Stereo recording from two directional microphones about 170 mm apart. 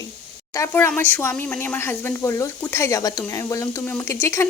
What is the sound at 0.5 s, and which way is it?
Speech, 15° left (ahead or behind).